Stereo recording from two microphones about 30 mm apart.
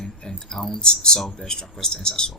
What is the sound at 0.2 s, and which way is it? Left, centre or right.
Speech, centre.